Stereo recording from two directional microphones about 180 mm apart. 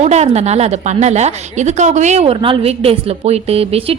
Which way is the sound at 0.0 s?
40° right (ahead or behind).